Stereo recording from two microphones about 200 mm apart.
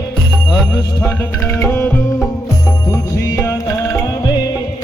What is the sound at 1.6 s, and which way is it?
Music, 10° left (ahead or behind).